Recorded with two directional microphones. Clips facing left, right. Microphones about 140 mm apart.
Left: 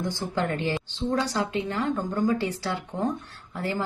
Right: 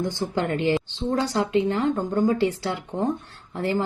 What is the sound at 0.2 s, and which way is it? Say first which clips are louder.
Speech: right 2 dB; 20° right (ahead or behind).